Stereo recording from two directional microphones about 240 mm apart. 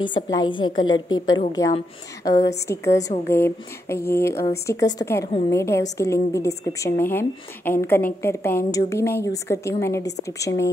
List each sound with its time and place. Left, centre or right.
0.1 s a woman's voice: centre
1.1 s a woman's voice: left
1.5 s a woman's voice: centre